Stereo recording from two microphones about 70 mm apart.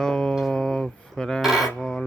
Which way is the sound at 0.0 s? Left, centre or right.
Centre.